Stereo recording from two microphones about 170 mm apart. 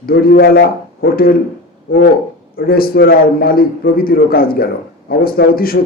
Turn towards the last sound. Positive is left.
turn(degrees=60)  # may be behind; listen again after turning